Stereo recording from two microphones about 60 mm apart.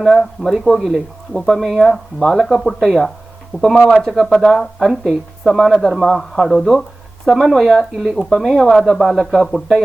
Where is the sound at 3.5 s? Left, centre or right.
Left.